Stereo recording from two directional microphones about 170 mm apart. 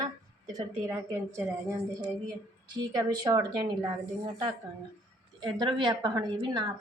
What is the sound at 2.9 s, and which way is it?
Speech, 25° right (ahead or behind).